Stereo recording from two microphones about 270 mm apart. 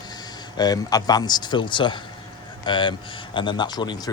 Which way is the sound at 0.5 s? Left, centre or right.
Centre.